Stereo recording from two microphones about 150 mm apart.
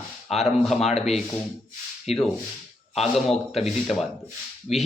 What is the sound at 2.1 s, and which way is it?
Speech, 45° left (ahead or behind).